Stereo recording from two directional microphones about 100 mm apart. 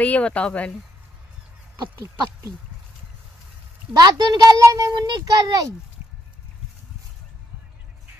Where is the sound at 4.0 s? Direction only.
45° right (ahead or behind).